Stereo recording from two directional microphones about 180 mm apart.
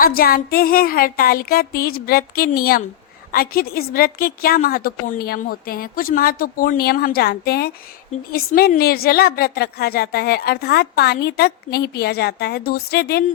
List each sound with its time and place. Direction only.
0.0 s a woman's voice: 55° left (ahead or behind)